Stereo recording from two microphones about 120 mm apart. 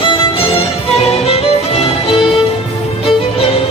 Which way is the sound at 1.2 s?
55° left (ahead or behind).